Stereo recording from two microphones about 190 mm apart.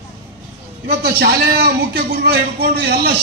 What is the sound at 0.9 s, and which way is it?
A man's voice, 55° right (ahead or behind).